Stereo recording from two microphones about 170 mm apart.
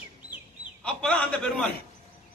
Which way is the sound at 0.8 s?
5° left (ahead or behind).